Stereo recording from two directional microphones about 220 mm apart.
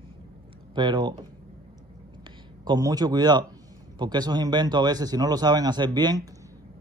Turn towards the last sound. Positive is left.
turn(degrees=-20)  # may be behind; listen again after turning